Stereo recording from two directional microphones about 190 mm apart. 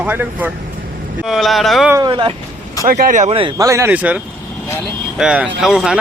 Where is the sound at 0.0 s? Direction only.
10° right (ahead or behind).